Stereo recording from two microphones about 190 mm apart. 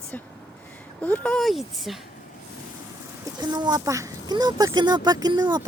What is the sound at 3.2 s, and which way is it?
Speech, 20° right (ahead or behind).